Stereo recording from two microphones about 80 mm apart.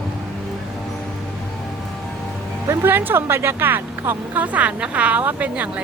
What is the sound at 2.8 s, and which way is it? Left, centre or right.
A woman's voice, right.